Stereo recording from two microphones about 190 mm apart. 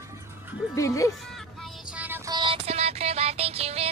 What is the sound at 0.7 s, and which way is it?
Speech, 15° left (ahead or behind).